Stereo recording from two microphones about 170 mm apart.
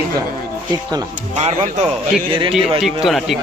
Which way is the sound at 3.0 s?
Centre (ahead or behind).